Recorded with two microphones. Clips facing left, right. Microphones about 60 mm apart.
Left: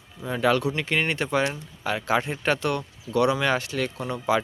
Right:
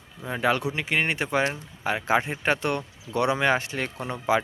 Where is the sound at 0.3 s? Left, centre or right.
Right.